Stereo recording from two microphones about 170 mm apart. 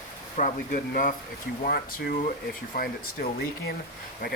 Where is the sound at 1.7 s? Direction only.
65° left (ahead or behind).